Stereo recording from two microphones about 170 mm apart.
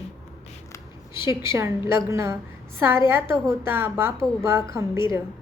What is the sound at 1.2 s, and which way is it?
A woman's voice, 15° right (ahead or behind).